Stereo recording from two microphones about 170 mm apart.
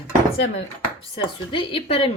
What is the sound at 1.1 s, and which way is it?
Speech, 30° left (ahead or behind).